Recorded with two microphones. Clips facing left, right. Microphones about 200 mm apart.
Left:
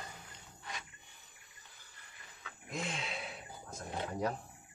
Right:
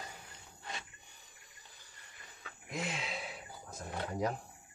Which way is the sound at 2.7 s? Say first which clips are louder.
Right 1 dB; 5° right (ahead or behind).